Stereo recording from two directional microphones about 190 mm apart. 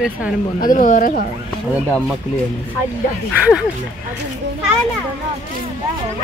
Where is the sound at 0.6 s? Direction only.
45° left (ahead or behind).